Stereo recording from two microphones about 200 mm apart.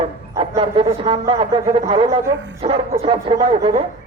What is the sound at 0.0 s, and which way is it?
Speech, 30° right (ahead or behind).